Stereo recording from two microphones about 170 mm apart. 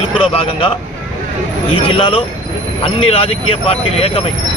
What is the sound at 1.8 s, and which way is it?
Speech, 30° left (ahead or behind).